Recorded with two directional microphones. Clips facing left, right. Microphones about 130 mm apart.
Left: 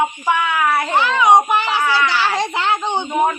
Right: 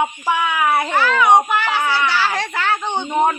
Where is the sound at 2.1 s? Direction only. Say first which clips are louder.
Left 2 dB; 15° left (ahead or behind).